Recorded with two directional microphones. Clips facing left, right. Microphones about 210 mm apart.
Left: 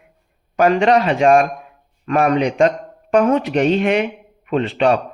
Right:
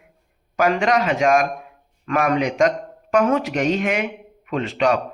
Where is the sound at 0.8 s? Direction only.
30° left (ahead or behind).